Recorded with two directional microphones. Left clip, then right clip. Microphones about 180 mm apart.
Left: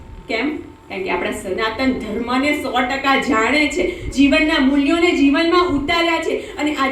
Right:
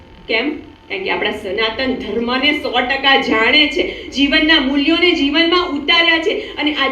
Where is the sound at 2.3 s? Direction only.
20° right (ahead or behind).